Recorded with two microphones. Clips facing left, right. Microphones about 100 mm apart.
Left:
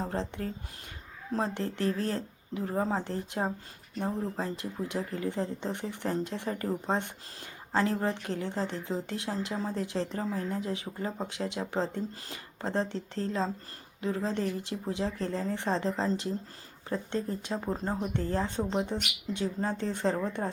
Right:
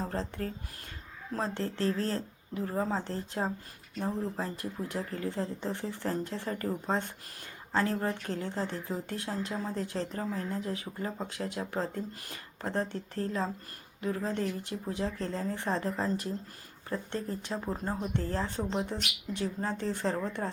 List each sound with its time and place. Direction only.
0.0 s speech: 20° left (ahead or behind)
1.5 s speech: 15° left (ahead or behind)